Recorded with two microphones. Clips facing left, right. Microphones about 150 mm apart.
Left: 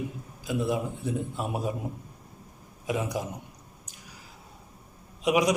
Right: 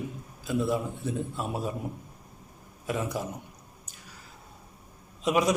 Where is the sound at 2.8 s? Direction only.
15° left (ahead or behind).